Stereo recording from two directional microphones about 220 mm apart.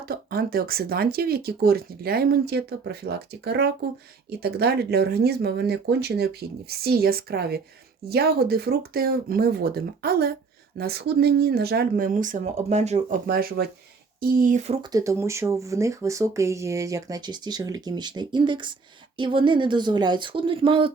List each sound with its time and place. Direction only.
0.1 s speech: 45° right (ahead or behind)
14.8 s speech: 15° right (ahead or behind)